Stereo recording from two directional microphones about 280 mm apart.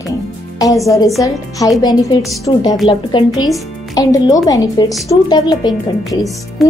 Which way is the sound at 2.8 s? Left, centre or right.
Centre.